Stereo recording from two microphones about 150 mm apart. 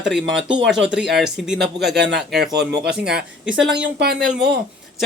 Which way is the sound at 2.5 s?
90° right.